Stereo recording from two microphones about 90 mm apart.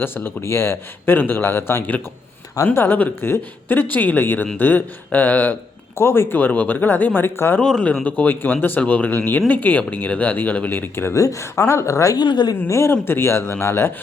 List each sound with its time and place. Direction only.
0.0 s speech: 25° left (ahead or behind)
7.6 s speech: 5° left (ahead or behind)
8.0 s a woman's voice: 20° left (ahead or behind)
12.1 s speech: 55° left (ahead or behind)
12.5 s speech: 30° left (ahead or behind)